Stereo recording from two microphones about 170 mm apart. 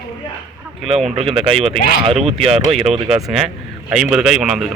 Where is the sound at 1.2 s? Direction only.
35° right (ahead or behind).